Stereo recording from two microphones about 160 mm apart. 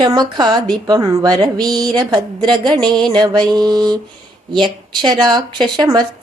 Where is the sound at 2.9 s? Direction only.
5° left (ahead or behind).